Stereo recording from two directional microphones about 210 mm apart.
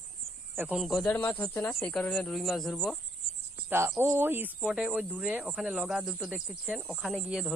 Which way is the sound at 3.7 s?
10° right (ahead or behind).